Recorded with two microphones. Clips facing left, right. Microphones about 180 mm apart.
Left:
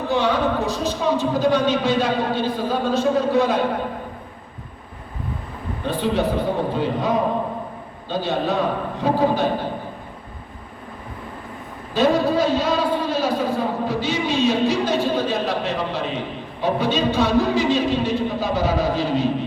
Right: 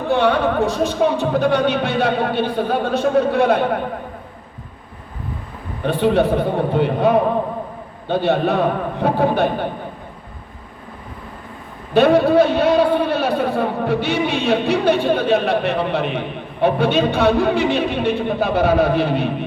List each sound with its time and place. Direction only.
0.1 s a man's voice: 60° right (ahead or behind)
5.8 s a man's voice: 60° right (ahead or behind)
11.9 s a man's voice: 60° right (ahead or behind)